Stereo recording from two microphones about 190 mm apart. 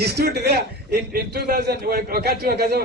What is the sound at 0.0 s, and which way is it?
A man's voice, 55° right (ahead or behind).